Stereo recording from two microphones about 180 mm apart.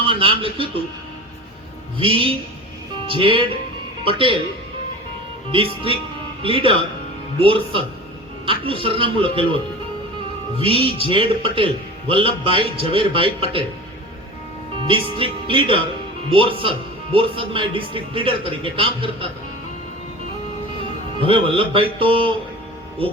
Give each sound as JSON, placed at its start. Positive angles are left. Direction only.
{"t": 0.0, "sound": "speech", "side_deg": -30}
{"t": 2.0, "sound": "speech", "side_deg": -30}
{"t": 6.4, "sound": "speech", "side_deg": -30}
{"t": 10.6, "sound": "speech", "side_deg": -30}
{"t": 14.8, "sound": "speech", "side_deg": -30}
{"t": 21.2, "sound": "speech", "side_deg": -30}